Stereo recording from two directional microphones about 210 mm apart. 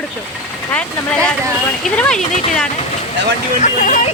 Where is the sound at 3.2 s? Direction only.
55° right (ahead or behind).